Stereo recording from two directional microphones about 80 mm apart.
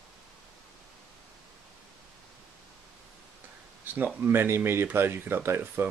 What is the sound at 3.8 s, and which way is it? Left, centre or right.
Speech, right.